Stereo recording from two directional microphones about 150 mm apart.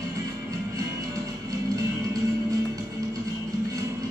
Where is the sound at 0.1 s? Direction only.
20° right (ahead or behind).